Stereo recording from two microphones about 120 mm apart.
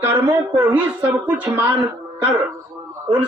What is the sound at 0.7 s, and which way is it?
Speech, 10° right (ahead or behind).